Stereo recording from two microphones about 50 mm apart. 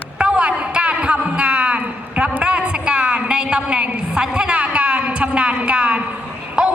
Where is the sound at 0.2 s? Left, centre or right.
Right.